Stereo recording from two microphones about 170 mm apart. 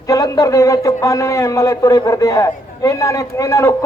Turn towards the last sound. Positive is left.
turn(degrees=15)  # may be behind; listen again after turning